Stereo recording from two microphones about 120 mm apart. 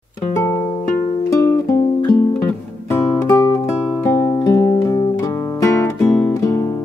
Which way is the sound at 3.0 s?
25° left (ahead or behind).